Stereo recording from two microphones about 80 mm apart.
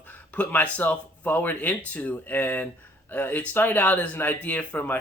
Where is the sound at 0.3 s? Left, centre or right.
Centre.